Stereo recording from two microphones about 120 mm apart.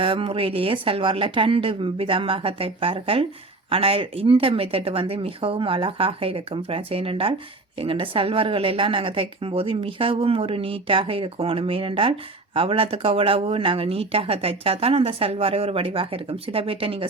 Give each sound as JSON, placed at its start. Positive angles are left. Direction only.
{"t": 0.0, "sound": "speech", "side_deg": -50}